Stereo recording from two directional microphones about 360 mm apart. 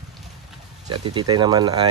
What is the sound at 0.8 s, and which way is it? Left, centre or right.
Speech, right.